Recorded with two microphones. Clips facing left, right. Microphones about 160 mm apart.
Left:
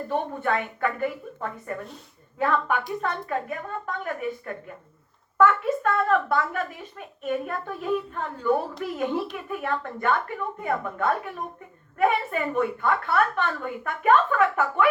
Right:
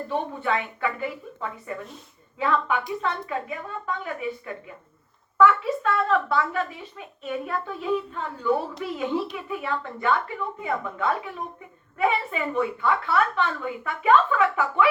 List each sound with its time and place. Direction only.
0.1 s speech: 45° left (ahead or behind)